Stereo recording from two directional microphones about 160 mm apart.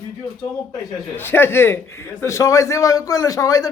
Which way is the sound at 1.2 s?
15° left (ahead or behind).